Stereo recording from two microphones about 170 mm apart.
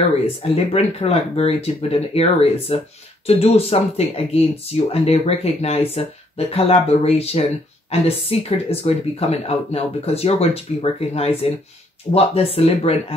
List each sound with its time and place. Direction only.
0.4 s speech: 35° left (ahead or behind)